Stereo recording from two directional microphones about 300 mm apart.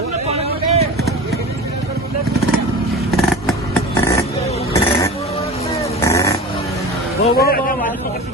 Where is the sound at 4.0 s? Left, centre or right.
Centre.